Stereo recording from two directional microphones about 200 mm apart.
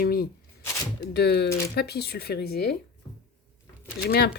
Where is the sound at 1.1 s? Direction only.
55° left (ahead or behind).